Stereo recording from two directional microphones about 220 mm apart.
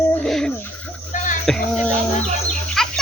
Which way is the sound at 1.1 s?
35° left (ahead or behind).